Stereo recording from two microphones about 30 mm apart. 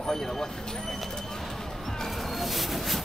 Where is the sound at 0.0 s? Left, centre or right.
Centre.